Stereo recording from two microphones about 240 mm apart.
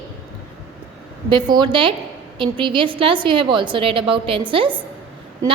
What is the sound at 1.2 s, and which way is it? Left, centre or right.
A woman's voice, centre.